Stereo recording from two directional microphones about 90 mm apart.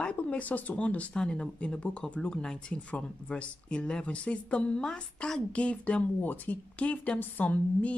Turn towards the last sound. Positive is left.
turn(degrees=15)  # may be behind; listen again after turning